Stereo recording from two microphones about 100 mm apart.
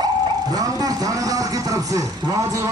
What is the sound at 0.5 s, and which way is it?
A man's voice, 40° right (ahead or behind).